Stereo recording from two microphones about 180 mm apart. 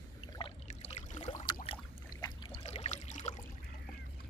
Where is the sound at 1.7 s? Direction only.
25° left (ahead or behind).